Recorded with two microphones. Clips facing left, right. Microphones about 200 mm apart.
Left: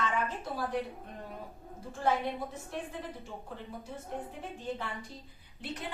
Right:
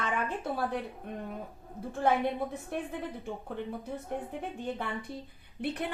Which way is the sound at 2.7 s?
60° right (ahead or behind).